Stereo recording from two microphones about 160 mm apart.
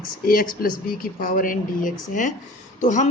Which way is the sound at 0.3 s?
65° left (ahead or behind).